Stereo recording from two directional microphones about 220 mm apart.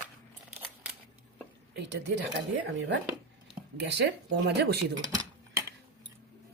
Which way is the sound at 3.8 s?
50° right (ahead or behind).